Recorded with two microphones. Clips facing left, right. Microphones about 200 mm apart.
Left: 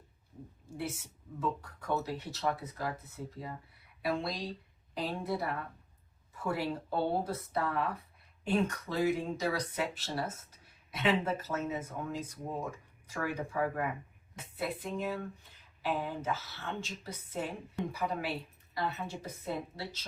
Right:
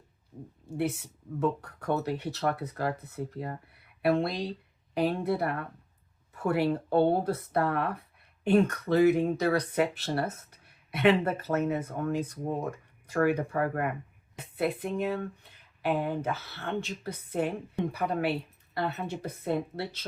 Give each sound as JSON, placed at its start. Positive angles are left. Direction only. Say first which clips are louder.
{"t": 1.4, "sound": "speech", "louder": "right 7 dB", "side_deg": -60}